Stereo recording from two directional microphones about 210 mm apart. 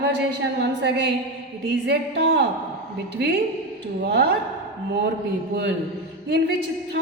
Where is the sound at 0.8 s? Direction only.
55° right (ahead or behind).